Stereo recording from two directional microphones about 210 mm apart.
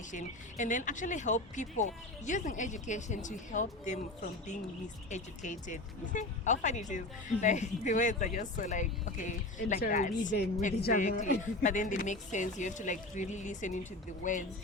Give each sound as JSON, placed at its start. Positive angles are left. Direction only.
{"t": 0.1, "sound": "speech", "side_deg": 35}
{"t": 5.1, "sound": "speech", "side_deg": 35}
{"t": 10.3, "sound": "speech", "side_deg": 50}